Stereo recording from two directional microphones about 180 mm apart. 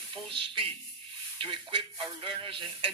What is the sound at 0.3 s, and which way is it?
A man's voice, 30° right (ahead or behind).